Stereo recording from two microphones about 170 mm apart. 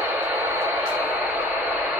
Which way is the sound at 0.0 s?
10° right (ahead or behind).